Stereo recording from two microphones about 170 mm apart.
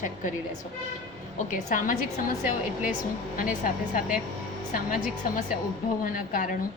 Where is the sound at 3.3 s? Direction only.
55° left (ahead or behind).